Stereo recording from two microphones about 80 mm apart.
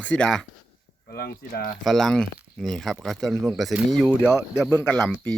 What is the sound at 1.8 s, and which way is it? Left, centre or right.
Speech, centre.